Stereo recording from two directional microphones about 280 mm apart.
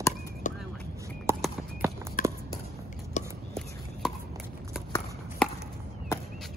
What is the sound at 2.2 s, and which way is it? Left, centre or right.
Walk, left.